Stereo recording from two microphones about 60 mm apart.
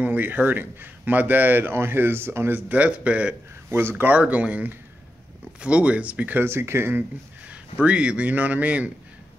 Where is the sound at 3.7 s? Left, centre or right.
Right.